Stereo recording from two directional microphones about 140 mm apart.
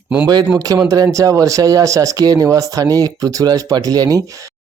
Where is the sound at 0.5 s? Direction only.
25° right (ahead or behind).